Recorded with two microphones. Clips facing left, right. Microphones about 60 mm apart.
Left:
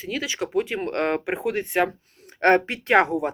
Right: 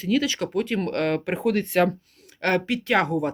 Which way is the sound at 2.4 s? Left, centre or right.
Left.